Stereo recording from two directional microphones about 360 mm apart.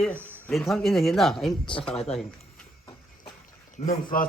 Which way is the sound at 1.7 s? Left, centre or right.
Centre.